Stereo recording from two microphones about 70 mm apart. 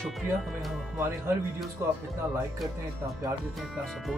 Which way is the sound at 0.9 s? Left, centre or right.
Right.